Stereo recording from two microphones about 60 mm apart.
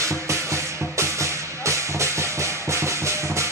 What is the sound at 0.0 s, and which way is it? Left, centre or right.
Music, right.